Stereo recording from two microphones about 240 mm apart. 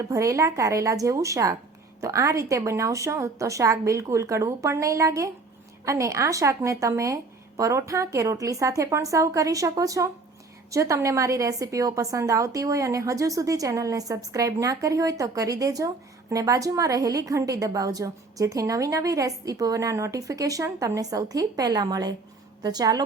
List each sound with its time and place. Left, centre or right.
0.1 s a woman's voice: centre